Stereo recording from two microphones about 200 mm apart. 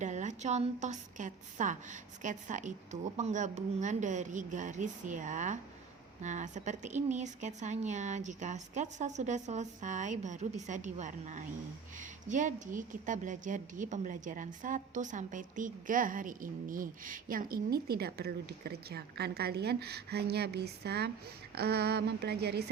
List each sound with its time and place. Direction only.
0.0 s a woman's voice: 35° right (ahead or behind); by 22.6 s 55° right (ahead or behind)